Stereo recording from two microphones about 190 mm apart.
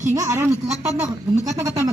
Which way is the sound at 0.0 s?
15° right (ahead or behind).